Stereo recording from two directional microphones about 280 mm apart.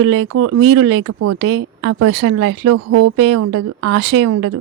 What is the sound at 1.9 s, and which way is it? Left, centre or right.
Speech, right.